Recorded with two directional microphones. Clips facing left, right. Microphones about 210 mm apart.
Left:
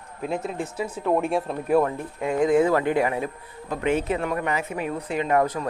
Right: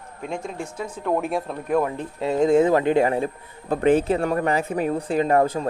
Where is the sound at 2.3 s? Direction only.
25° right (ahead or behind).